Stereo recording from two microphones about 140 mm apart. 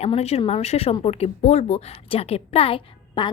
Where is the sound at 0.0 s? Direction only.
50° left (ahead or behind).